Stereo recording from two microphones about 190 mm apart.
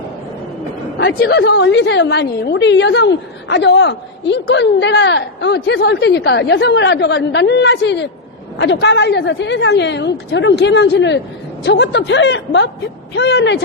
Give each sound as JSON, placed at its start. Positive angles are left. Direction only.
{"t": 0.9, "sound": "a woman's voice", "side_deg": 60}